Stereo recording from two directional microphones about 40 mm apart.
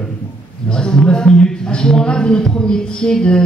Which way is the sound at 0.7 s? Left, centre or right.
Centre.